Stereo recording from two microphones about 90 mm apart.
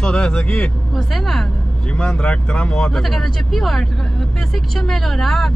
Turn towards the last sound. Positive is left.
turn(degrees=5)  # may be behind; listen again after turning